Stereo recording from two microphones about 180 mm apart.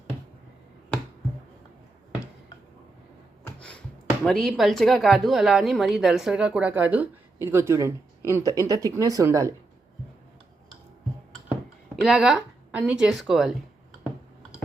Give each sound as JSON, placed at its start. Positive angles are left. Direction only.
{"t": 3.4, "sound": "speech", "side_deg": 5}
{"t": 12.0, "sound": "speech", "side_deg": 0}